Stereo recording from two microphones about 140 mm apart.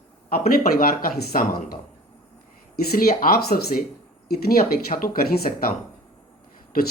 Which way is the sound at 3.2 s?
90° left.